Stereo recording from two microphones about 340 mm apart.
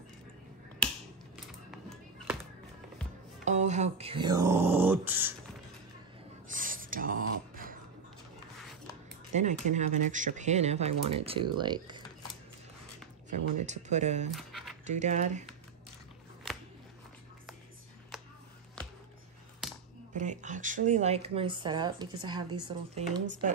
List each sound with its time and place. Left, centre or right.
1.3 s music: centre
3.4 s speech: right
6.4 s a sound: right
9.3 s speech: right
13.7 s speech: centre
14.3 s a sound: centre
14.9 s speech: right
19.6 s computer keyboard: centre
20.2 s speech: right